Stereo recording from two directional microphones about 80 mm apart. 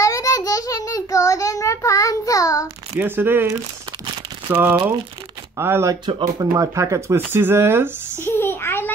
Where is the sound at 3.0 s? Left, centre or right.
Right.